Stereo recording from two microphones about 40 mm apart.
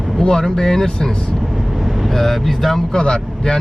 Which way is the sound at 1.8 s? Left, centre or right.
Centre.